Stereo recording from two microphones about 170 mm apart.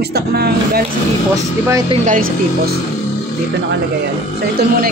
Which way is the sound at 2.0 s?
55° right (ahead or behind).